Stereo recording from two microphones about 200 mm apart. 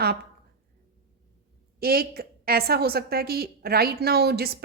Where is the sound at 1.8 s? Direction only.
50° right (ahead or behind).